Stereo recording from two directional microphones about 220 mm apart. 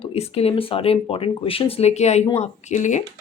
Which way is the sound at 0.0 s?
25° left (ahead or behind).